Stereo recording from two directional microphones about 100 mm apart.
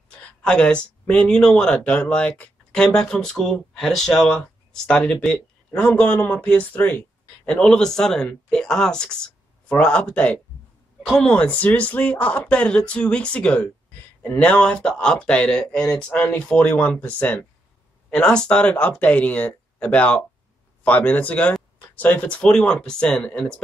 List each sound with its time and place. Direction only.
0.4 s speech: 10° left (ahead or behind)
11.0 s speech: centre (ahead or behind)
11.3 s speech: 15° left (ahead or behind)